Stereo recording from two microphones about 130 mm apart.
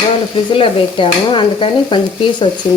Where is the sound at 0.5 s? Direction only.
45° left (ahead or behind).